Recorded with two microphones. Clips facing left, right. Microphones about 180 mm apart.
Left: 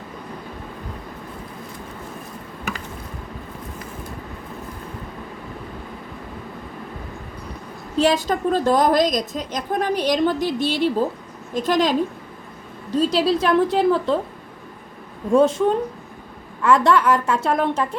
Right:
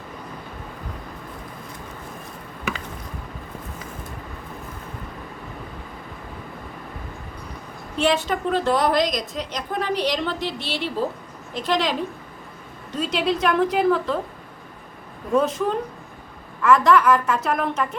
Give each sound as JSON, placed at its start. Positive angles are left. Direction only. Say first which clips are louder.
{"t": 7.9, "sound": "a woman's voice", "louder": "left 3 dB", "side_deg": 35}
{"t": 13.0, "sound": "a woman's voice", "louder": "left 4 dB", "side_deg": 35}
{"t": 15.4, "sound": "a woman's voice", "louder": "left 5 dB", "side_deg": 25}
{"t": 16.6, "sound": "a woman's voice", "louder": "even", "side_deg": 30}